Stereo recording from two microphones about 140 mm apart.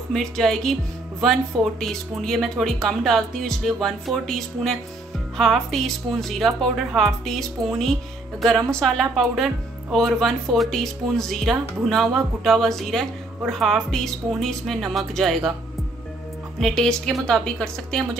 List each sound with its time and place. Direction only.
0.1 s speech: 5° left (ahead or behind)
16.5 s speech: 5° left (ahead or behind)